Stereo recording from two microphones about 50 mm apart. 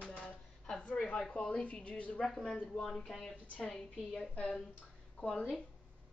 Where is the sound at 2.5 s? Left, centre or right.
Left.